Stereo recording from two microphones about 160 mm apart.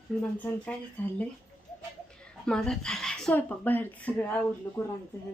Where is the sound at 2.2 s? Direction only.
5° left (ahead or behind).